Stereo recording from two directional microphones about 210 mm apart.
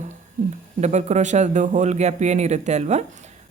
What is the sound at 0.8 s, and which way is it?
A woman's voice, 35° right (ahead or behind).